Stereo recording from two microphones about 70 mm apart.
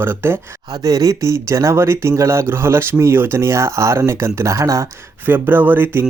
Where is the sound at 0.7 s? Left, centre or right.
Right.